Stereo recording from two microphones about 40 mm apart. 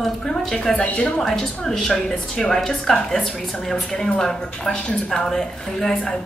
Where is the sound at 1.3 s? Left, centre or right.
Centre.